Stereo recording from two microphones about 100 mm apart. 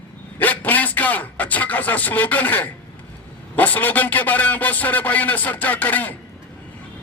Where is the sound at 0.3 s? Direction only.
15° left (ahead or behind).